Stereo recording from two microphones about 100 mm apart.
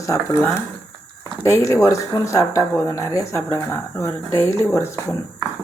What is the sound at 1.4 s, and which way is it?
Speech, 30° left (ahead or behind).